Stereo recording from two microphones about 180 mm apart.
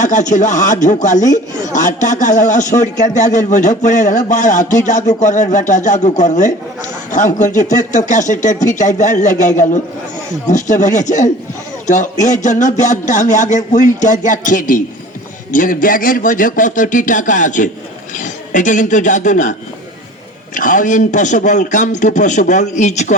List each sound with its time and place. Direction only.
0.0 s a man's voice: 45° left (ahead or behind)
20.6 s a man's voice: 45° left (ahead or behind)